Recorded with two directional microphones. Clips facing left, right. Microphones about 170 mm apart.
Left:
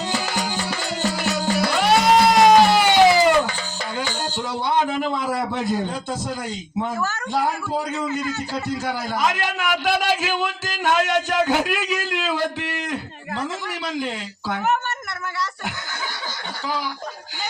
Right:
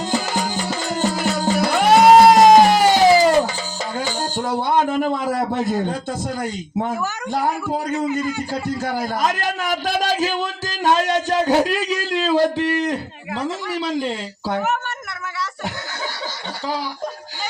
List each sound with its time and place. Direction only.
0.9 s music: 45° right (ahead or behind)
4.2 s speech: 45° right (ahead or behind)
8.0 s a man's voice: 15° right (ahead or behind)
8.8 s a man's voice: 45° right (ahead or behind)
14.6 s a man's voice: 5° right (ahead or behind)